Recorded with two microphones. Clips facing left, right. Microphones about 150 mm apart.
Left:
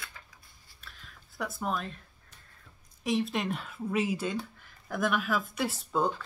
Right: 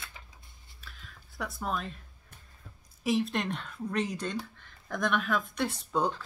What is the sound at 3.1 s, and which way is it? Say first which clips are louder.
Speech: right 1 dB; centre (ahead or behind).